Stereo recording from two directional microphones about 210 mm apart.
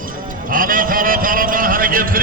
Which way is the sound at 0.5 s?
40° right (ahead or behind).